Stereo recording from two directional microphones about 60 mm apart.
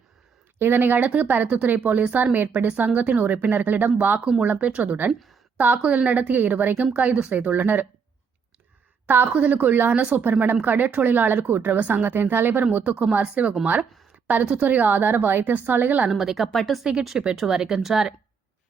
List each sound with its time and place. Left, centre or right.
0.6 s a woman's voice: right
9.0 s a woman's voice: right
12.7 s a woman's voice: right
16.0 s speech: centre
16.8 s speech: centre